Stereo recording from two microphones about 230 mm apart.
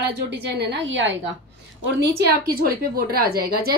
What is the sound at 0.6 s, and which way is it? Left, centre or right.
A woman's voice, right.